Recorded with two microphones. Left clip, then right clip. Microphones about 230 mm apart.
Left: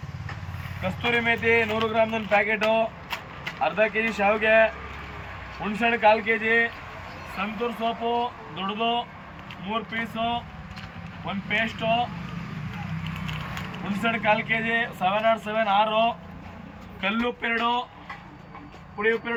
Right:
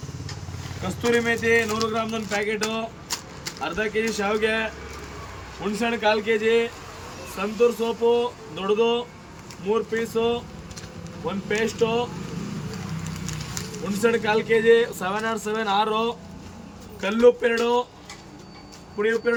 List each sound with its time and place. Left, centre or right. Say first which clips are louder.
1.1 s speech: right 1 dB; centre
5.8 s speech: left 3 dB; centre
14.0 s speech: right 2 dB; centre
18.9 s speech: right 2 dB; centre